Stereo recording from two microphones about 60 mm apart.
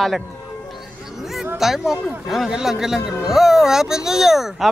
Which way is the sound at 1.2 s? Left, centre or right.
Centre.